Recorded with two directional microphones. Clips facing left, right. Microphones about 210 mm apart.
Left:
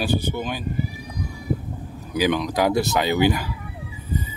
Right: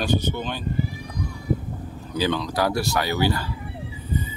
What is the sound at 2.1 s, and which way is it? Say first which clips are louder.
Speech: left 3 dB; 15° left (ahead or behind).